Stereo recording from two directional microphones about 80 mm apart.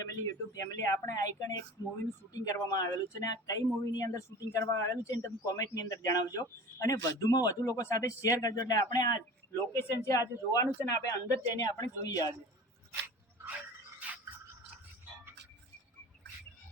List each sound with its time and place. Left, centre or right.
0.0 s speech: left
9.7 s a woman's voice: left